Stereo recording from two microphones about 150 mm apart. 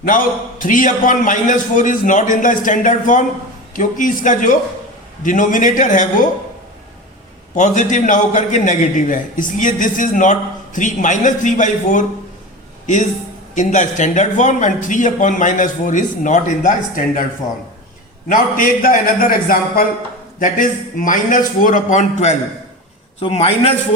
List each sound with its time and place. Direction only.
0.0 s a man's voice: 65° left (ahead or behind)
7.5 s a man's voice: 55° left (ahead or behind)
18.3 s a man's voice: 70° left (ahead or behind); by 22.4 s 50° left (ahead or behind)
23.2 s a man's voice: 40° left (ahead or behind)